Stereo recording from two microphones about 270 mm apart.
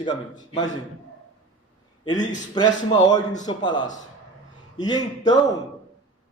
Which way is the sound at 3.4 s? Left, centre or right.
Centre.